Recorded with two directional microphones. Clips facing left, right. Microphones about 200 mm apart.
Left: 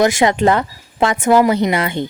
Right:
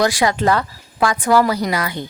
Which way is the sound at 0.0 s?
20° left (ahead or behind).